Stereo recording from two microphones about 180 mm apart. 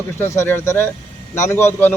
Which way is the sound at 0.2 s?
15° left (ahead or behind).